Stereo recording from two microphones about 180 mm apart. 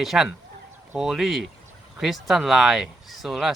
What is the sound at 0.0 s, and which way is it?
Speech, centre (ahead or behind).